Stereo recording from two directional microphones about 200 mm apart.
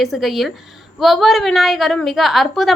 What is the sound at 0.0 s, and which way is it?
A woman's voice, centre (ahead or behind).